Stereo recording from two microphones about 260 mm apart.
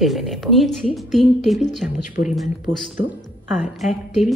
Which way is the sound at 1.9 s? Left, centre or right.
Left.